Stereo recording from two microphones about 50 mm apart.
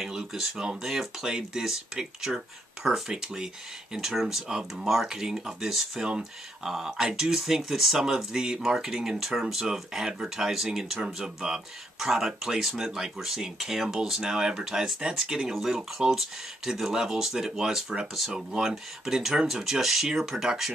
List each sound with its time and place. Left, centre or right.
0.0 s speech: centre
6.0 s speech: centre
18.3 s speech: centre